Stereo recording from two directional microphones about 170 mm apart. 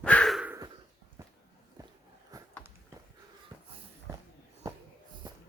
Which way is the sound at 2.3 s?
20° right (ahead or behind).